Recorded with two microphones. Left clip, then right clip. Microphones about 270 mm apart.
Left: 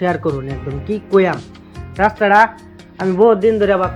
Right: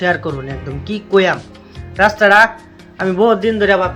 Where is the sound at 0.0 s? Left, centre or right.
Centre.